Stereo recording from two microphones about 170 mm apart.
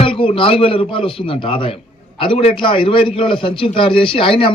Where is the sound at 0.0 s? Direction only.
30° left (ahead or behind).